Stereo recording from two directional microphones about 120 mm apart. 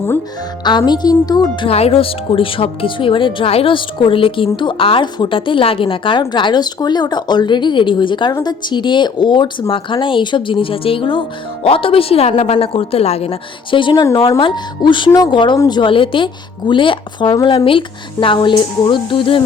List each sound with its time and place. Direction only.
0.6 s speech: 40° left (ahead or behind)
1.6 s speech: 55° left (ahead or behind)
14.0 s speech: 25° left (ahead or behind)
14.3 s speech: 45° left (ahead or behind)
17.3 s speech: 35° left (ahead or behind)